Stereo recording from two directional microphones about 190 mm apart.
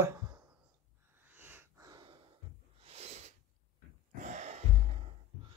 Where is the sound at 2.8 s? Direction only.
35° right (ahead or behind).